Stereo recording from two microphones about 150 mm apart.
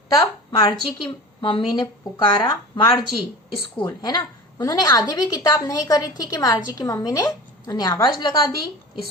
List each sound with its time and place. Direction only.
0.6 s a woman's voice: 30° left (ahead or behind)